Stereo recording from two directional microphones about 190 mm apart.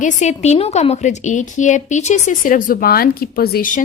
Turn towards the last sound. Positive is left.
turn(degrees=50)  # may be behind; listen again after turning